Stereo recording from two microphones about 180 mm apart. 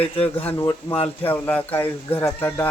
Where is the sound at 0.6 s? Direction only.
30° left (ahead or behind).